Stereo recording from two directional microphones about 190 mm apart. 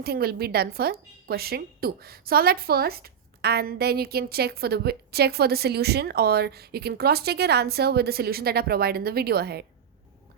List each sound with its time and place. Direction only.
0.0 s speech: 55° right (ahead or behind)